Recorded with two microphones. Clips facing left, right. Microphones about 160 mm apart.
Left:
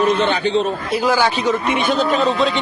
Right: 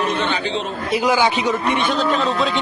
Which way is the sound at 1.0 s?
15° right (ahead or behind).